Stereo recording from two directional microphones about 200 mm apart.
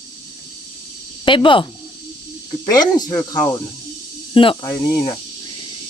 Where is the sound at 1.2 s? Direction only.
25° left (ahead or behind).